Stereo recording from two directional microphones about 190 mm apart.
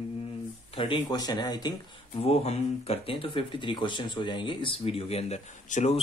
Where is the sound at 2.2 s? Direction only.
30° left (ahead or behind).